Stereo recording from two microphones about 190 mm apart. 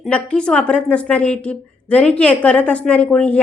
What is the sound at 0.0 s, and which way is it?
A woman's voice, 5° left (ahead or behind).